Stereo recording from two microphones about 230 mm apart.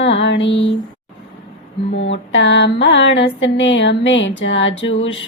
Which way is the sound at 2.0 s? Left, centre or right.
Left.